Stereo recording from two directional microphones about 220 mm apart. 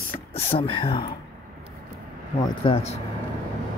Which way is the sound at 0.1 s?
25° left (ahead or behind).